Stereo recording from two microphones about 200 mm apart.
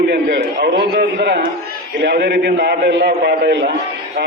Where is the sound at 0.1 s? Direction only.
50° right (ahead or behind).